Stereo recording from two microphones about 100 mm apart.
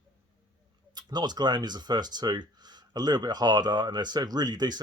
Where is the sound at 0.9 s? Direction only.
45° right (ahead or behind).